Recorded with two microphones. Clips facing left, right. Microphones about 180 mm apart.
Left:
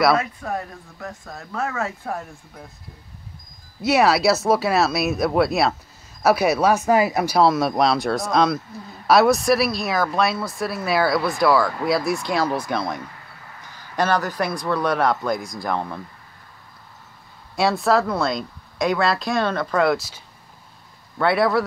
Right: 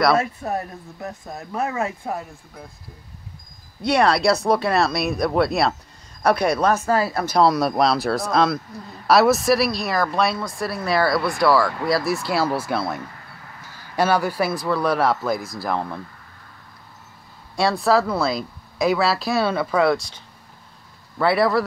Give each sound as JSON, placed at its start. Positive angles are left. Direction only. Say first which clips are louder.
{"t": 0.1, "sound": "speech", "louder": "right 1 dB", "side_deg": -25}
{"t": 3.8, "sound": "a man's voice", "louder": "left 1 dB", "side_deg": 5}
{"t": 7.3, "sound": "a man's voice", "louder": "right 1 dB", "side_deg": 0}
{"t": 17.6, "sound": "a man's voice", "louder": "even", "side_deg": 0}
{"t": 21.2, "sound": "a man's voice", "louder": "even", "side_deg": 0}